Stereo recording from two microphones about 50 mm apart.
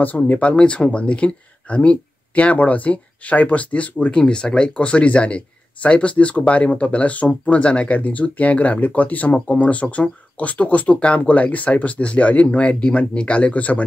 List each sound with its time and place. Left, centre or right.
0.3 s speech: left